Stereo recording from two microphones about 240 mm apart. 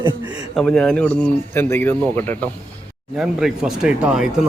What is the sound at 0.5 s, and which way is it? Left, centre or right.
A man's voice, centre.